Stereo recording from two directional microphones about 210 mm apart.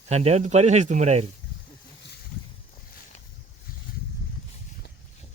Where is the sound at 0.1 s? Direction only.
30° right (ahead or behind).